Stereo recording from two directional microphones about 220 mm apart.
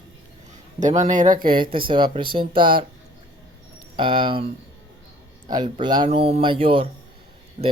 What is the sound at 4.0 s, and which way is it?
Speech, 20° right (ahead or behind).